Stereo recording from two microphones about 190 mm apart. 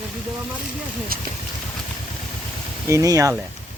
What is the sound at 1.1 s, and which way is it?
Speech, 50° right (ahead or behind).